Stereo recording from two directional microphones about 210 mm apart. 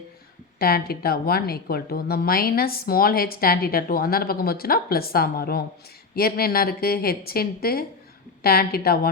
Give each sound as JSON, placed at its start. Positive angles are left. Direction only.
{"t": 0.6, "sound": "speech", "side_deg": 45}